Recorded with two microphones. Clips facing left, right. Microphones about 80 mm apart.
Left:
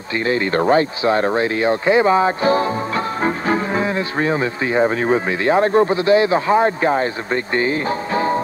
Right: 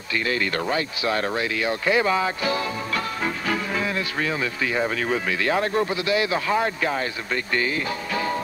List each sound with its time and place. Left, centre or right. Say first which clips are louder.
0.2 s speech: left 9 dB; left